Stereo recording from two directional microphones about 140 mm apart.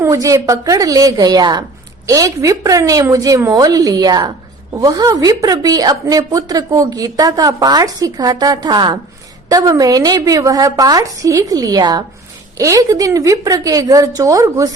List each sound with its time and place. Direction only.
0.0 s a woman's voice: 20° right (ahead or behind)